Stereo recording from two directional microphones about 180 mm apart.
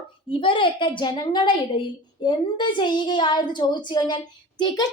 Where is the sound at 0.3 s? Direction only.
30° left (ahead or behind).